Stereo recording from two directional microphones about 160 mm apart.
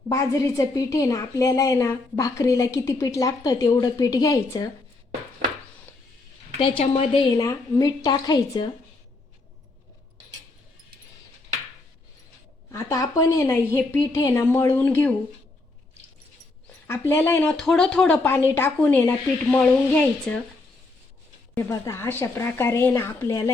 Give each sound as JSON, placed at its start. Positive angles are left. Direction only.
{"t": 0.1, "sound": "a woman's voice", "side_deg": 20}
{"t": 6.6, "sound": "a woman's voice", "side_deg": 35}
{"t": 7.3, "sound": "a woman's voice", "side_deg": 20}
{"t": 12.7, "sound": "a woman's voice", "side_deg": 20}
{"t": 17.1, "sound": "speech", "side_deg": 15}
{"t": 21.5, "sound": "speech", "side_deg": 15}